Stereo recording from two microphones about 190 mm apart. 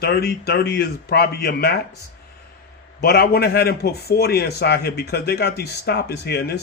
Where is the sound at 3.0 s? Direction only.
55° left (ahead or behind).